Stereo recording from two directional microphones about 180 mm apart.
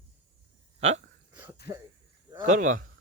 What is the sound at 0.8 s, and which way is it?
Speech, 35° right (ahead or behind).